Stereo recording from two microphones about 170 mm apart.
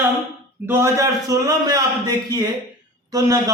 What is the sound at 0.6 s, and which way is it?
A man's voice, 15° right (ahead or behind).